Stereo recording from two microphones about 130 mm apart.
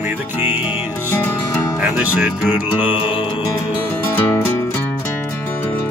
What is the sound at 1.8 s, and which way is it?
Music, 10° right (ahead or behind).